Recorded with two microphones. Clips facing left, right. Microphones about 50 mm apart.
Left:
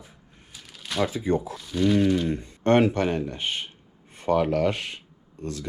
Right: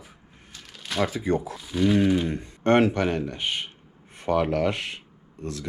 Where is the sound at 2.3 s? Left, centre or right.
Right.